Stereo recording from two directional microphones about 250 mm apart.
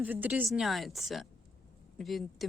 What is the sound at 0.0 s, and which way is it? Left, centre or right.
Speech, centre.